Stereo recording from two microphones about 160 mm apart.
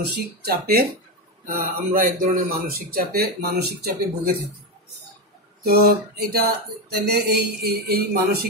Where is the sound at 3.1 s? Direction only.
85° right.